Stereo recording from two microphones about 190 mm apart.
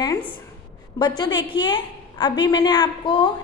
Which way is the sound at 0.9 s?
20° left (ahead or behind).